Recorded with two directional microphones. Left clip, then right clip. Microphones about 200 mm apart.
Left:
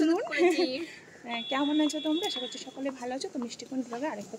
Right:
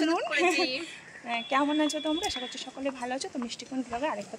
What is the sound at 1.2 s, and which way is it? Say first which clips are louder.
Speech: right 3 dB; 5° right (ahead or behind).